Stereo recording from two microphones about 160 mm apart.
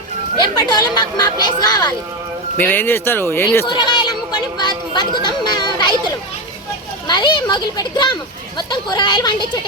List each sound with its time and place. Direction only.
0.4 s speech: 25° left (ahead or behind)
2.6 s speech: 10° left (ahead or behind)
3.7 s speech: 30° left (ahead or behind)